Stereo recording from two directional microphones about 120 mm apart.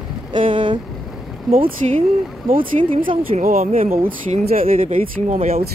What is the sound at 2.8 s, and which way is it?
Boat, 45° right (ahead or behind).